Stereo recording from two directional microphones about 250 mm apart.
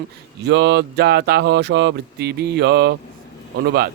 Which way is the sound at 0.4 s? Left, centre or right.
Right.